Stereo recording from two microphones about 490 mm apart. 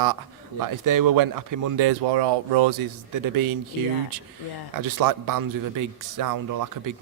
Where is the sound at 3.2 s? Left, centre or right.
Right.